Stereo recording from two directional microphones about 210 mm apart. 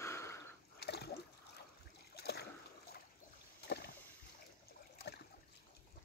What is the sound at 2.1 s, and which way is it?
Boat, 50° left (ahead or behind).